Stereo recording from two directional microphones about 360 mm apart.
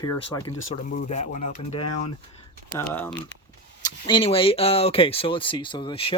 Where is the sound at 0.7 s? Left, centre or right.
Centre.